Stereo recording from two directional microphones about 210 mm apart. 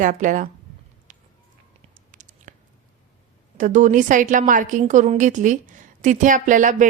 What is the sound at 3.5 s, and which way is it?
A woman's voice, 35° right (ahead or behind).